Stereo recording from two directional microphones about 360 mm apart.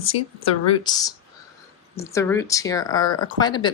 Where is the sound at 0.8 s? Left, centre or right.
Centre.